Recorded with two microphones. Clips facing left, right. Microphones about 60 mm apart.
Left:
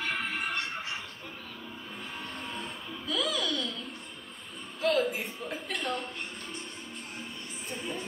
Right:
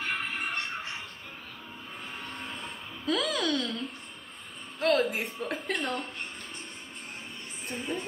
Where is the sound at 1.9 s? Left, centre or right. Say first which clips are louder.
Right 1 dB; right.